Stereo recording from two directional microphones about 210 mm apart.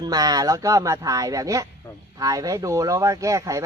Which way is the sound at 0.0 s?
20° right (ahead or behind).